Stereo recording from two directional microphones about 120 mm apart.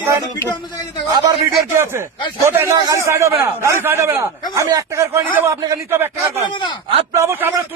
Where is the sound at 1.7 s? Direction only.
20° right (ahead or behind).